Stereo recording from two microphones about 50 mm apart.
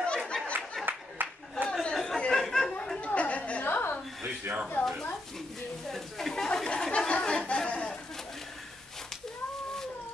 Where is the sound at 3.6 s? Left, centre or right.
Left.